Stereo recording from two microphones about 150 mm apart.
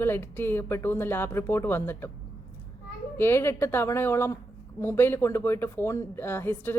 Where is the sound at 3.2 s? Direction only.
15° left (ahead or behind).